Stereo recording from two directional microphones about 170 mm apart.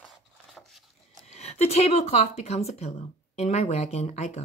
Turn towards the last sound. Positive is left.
turn(degrees=40)  # may be behind; listen again after turning